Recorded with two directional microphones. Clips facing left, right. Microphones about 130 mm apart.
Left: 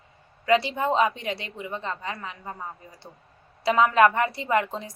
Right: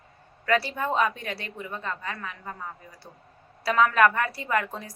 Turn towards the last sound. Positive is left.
turn(degrees=20)  # may be behind; listen again after turning